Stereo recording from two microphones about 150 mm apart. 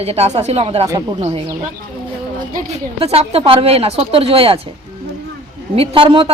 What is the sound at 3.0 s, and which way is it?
Speech, 40° right (ahead or behind).